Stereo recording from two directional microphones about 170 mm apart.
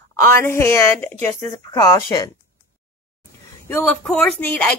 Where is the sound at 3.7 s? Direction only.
10° left (ahead or behind).